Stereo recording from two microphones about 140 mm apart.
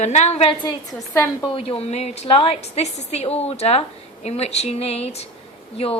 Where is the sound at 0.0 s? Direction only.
55° left (ahead or behind).